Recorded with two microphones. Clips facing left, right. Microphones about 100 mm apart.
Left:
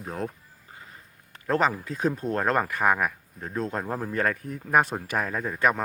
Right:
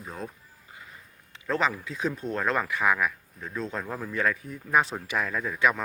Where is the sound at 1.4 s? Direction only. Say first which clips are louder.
Left 3 dB; 45° left (ahead or behind).